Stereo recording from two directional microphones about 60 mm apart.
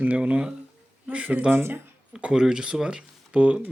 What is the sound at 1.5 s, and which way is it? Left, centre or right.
Speech, right.